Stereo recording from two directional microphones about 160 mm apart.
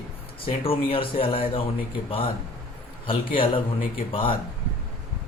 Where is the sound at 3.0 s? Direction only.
35° left (ahead or behind).